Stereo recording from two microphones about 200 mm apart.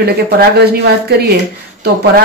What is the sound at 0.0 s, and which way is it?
Speech, 50° right (ahead or behind).